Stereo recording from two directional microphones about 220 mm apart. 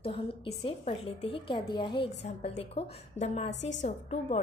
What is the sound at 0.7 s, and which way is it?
A woman's voice, 25° left (ahead or behind).